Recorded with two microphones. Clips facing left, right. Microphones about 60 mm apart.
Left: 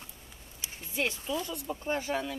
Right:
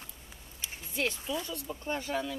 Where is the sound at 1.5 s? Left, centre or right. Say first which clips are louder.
Left 3 dB; centre.